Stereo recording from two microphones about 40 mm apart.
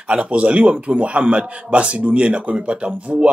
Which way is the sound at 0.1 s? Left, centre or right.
Right.